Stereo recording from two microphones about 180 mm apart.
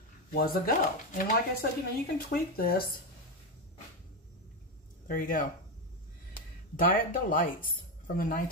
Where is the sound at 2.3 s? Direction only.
55° left (ahead or behind).